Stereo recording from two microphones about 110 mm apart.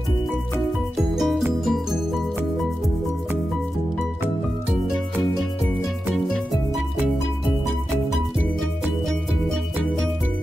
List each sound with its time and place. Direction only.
1.1 s music: centre (ahead or behind)
6.1 s music: centre (ahead or behind)